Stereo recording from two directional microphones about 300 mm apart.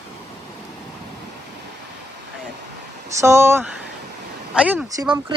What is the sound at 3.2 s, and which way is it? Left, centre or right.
Speech, centre.